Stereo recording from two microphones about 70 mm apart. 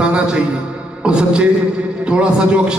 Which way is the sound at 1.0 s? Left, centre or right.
Centre.